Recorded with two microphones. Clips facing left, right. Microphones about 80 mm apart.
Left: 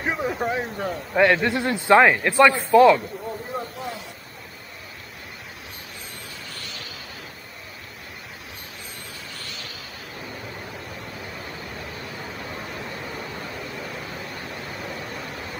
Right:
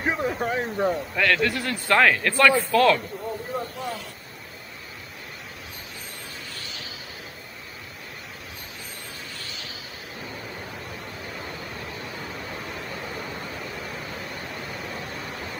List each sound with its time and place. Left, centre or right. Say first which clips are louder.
0.0 s speech: even; centre
0.7 s speech: right 5 dB; centre
1.1 s speech: left 4 dB; left
13.2 s vehicle: left 1 dB; centre